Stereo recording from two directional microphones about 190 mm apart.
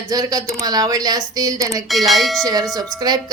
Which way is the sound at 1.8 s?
Centre (ahead or behind).